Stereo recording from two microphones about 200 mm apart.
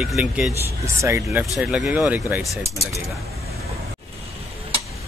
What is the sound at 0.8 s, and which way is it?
Speech, 15° right (ahead or behind).